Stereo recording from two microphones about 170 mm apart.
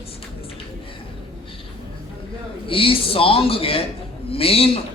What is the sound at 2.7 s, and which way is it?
A man's voice, 30° left (ahead or behind).